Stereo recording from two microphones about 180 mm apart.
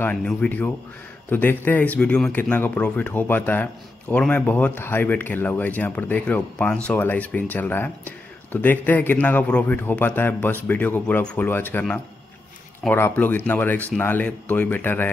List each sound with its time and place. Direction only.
0.0 s speech: 5° left (ahead or behind)